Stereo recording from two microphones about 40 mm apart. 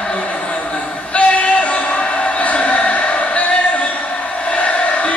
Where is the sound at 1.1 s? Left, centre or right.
Left.